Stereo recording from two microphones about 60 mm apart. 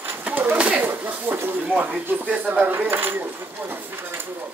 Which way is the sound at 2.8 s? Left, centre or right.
Right.